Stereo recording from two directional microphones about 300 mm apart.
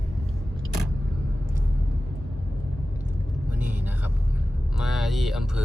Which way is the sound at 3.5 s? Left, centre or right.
Centre.